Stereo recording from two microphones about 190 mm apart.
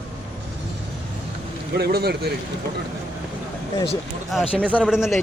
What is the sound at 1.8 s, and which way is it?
Speech, 55° right (ahead or behind).